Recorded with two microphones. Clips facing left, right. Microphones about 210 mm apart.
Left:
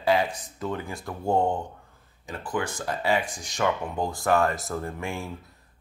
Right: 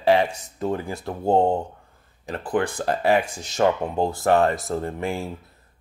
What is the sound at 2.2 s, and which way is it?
Speech, 60° right (ahead or behind).